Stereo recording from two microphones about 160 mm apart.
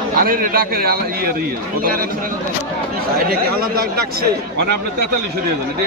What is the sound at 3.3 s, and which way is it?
Speech, 70° right (ahead or behind).